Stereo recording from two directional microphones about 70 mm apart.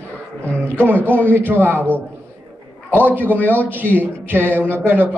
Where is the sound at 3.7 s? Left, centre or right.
Right.